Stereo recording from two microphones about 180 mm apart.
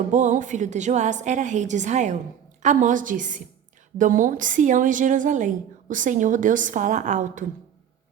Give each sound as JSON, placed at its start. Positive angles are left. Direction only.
{"t": 0.1, "sound": "a woman's voice", "side_deg": -45}